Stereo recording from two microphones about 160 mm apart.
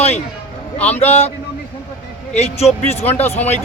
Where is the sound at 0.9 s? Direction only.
40° left (ahead or behind).